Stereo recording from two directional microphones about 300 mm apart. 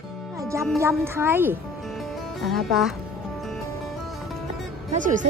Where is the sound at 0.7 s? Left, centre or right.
Centre.